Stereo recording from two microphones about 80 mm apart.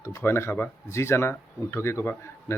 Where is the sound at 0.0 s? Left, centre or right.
Left.